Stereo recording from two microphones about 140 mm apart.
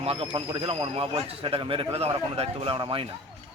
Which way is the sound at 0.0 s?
40° right (ahead or behind).